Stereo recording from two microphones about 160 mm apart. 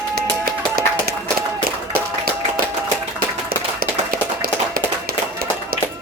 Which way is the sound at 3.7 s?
65° right (ahead or behind).